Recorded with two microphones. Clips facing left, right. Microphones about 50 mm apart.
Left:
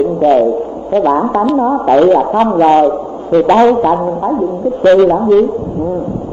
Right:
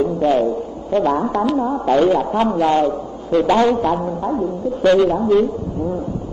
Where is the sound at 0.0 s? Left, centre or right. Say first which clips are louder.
Left 6 dB; centre.